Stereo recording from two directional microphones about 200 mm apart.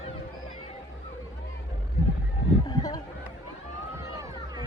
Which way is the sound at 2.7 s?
20° left (ahead or behind).